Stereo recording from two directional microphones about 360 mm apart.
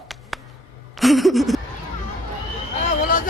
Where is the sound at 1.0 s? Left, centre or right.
Centre.